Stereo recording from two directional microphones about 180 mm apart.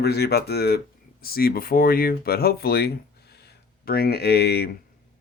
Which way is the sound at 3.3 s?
65° left (ahead or behind).